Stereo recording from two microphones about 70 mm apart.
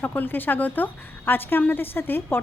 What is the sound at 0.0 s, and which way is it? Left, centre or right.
A woman's voice, left.